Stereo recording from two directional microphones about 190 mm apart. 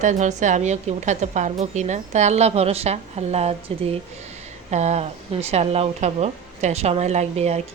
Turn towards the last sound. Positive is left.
turn(degrees=-35)  # may be behind; listen again after turning